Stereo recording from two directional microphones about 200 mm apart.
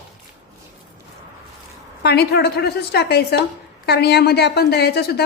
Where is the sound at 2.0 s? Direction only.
55° left (ahead or behind).